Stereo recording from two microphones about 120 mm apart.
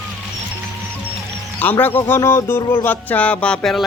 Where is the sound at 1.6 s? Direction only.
15° left (ahead or behind).